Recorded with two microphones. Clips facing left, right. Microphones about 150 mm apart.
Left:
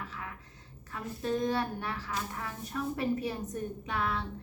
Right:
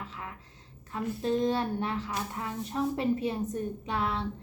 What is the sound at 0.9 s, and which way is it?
A woman's voice, 25° right (ahead or behind).